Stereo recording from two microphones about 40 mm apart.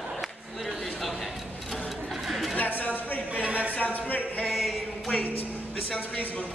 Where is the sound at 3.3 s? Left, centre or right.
Right.